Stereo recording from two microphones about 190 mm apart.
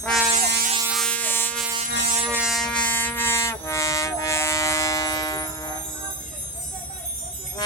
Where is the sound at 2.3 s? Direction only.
Centre (ahead or behind); by 5.7 s 20° left (ahead or behind).